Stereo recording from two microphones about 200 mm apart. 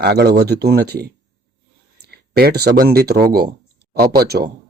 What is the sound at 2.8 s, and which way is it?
Speech, 50° right (ahead or behind).